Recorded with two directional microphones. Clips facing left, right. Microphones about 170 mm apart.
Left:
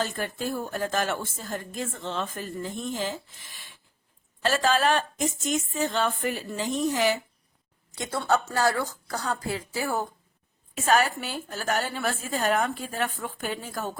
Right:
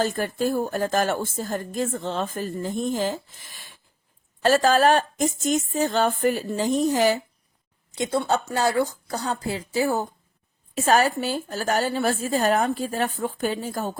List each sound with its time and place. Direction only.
0.0 s a woman's voice: 40° right (ahead or behind)
4.4 s a woman's voice: 40° right (ahead or behind)
7.9 s speech: 20° right (ahead or behind)
10.8 s a woman's voice: 35° right (ahead or behind)